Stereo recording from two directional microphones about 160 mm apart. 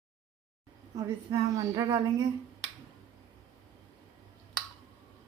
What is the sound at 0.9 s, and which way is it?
A woman's voice, 25° right (ahead or behind).